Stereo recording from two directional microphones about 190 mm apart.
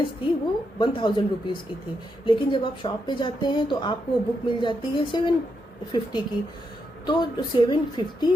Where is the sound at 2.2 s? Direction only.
25° left (ahead or behind).